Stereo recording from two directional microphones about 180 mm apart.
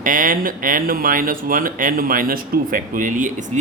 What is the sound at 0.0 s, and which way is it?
Speech, 50° right (ahead or behind).